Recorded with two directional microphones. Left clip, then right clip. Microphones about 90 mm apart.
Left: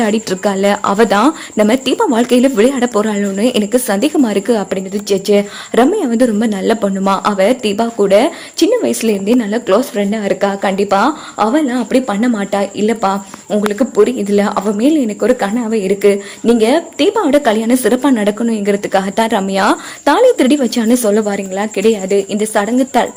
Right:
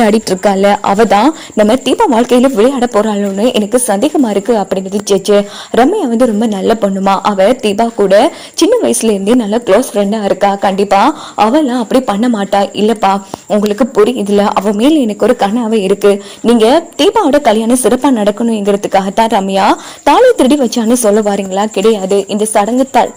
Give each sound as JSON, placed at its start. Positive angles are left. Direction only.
{"t": 0.4, "sound": "speech", "side_deg": -40}
{"t": 3.9, "sound": "a woman's voice", "side_deg": -10}
{"t": 5.0, "sound": "speech", "side_deg": -40}
{"t": 5.7, "sound": "speech", "side_deg": -20}
{"t": 9.2, "sound": "a woman's voice", "side_deg": -55}
{"t": 9.5, "sound": "speech", "side_deg": -40}
{"t": 10.1, "sound": "speech", "side_deg": -30}
{"t": 14.8, "sound": "a woman's voice", "side_deg": -60}
{"t": 17.2, "sound": "speech", "side_deg": -30}
{"t": 22.9, "sound": "a woman's voice", "side_deg": -5}